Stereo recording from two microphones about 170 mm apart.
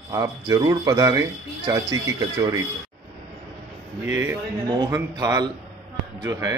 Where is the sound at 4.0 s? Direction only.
15° right (ahead or behind).